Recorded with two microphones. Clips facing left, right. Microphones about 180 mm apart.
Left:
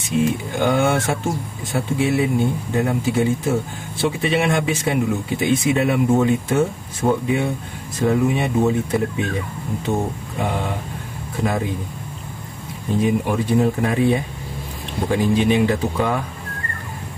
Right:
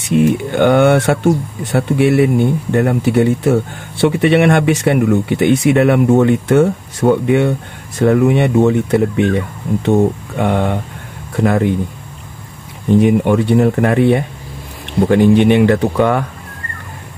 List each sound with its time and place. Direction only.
0.0 s speech: 70° right (ahead or behind)
13.0 s speech: 70° right (ahead or behind)